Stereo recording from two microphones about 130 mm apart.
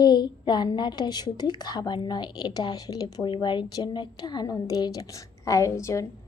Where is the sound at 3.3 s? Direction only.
40° left (ahead or behind); by 6.0 s 25° left (ahead or behind).